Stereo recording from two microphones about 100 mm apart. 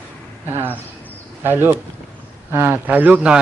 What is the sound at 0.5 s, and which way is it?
Speech, 20° right (ahead or behind).